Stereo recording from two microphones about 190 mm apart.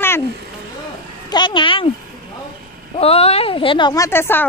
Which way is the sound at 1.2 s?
25° left (ahead or behind).